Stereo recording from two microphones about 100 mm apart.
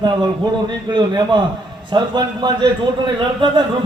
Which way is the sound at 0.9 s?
50° right (ahead or behind).